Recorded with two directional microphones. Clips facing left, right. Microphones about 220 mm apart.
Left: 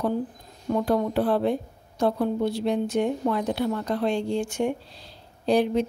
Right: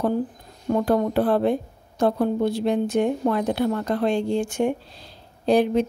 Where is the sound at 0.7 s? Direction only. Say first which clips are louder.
Right 3 dB; 50° right (ahead or behind).